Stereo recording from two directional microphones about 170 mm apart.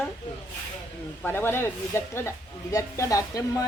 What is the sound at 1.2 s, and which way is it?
Speech, 10° left (ahead or behind).